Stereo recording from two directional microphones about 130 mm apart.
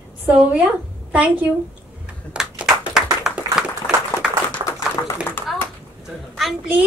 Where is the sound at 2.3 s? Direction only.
5° right (ahead or behind).